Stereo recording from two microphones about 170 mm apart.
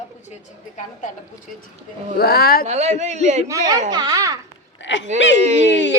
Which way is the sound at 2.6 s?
40° right (ahead or behind).